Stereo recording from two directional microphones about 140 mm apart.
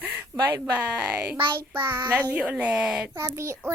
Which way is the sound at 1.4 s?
35° right (ahead or behind).